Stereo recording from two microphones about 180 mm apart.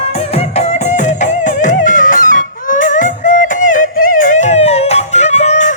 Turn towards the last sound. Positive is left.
turn(degrees=40)  # may be behind; listen again after turning